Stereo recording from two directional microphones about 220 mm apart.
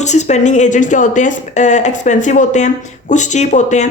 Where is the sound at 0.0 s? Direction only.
30° left (ahead or behind).